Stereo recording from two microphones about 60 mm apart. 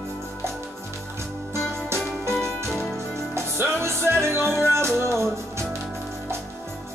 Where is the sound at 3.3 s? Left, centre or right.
Right.